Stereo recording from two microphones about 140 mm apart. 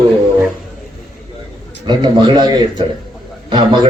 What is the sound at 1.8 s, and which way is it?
A man's voice, 30° right (ahead or behind).